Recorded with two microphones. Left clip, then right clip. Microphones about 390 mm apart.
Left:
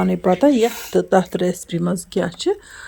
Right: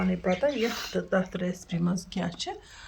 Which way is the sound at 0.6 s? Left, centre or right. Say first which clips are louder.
Left 11 dB; centre.